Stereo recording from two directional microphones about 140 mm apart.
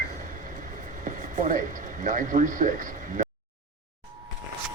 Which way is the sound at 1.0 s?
70° right (ahead or behind).